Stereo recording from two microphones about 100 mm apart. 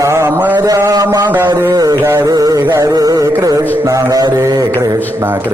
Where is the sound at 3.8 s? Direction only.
35° right (ahead or behind).